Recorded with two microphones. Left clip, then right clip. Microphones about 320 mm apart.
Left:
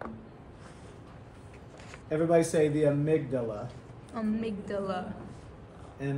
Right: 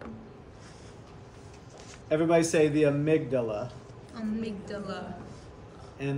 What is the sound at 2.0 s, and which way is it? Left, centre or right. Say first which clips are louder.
A man's voice: right 1 dB; centre.